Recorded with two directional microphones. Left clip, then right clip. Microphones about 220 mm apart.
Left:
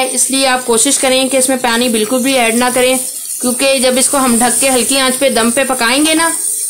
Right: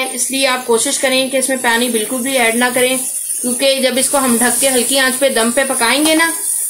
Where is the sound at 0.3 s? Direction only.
50° left (ahead or behind).